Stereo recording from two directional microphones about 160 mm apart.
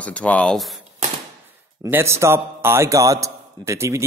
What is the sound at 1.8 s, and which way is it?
A man's voice, 15° right (ahead or behind).